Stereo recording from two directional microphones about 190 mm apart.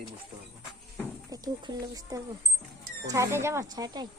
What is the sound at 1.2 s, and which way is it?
Speech, 20° right (ahead or behind).